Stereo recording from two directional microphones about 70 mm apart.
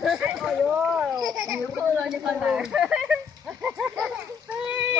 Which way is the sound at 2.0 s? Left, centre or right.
Centre.